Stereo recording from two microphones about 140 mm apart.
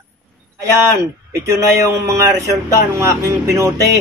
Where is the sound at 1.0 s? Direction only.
20° right (ahead or behind).